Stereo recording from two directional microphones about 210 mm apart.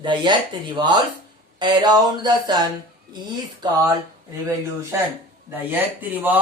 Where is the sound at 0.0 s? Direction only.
20° right (ahead or behind).